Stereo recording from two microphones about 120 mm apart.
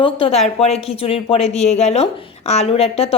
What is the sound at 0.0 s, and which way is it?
A woman's voice, 55° left (ahead or behind).